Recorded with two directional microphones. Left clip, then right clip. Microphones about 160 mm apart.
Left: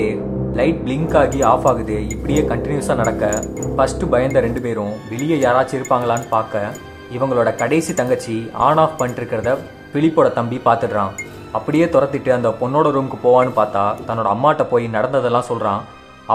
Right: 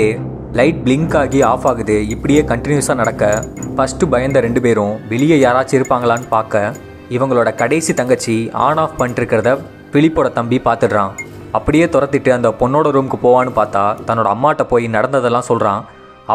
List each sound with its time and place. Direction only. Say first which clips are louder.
0.0 s speech: right 4 dB; 30° right (ahead or behind)